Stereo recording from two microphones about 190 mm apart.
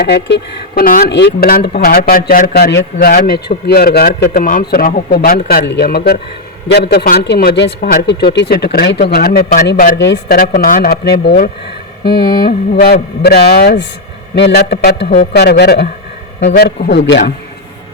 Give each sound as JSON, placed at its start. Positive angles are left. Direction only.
{"t": 0.0, "sound": "speech", "side_deg": 60}